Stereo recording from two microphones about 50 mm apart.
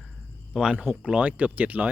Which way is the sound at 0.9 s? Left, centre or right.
Right.